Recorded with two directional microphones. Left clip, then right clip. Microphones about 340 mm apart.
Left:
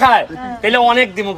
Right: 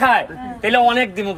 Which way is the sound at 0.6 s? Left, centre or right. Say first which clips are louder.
Left 3 dB; centre.